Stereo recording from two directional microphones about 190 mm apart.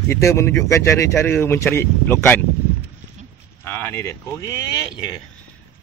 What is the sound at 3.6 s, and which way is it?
Speech, 10° left (ahead or behind).